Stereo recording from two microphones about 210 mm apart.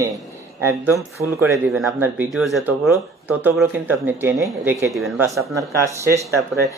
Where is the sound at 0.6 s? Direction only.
10° right (ahead or behind).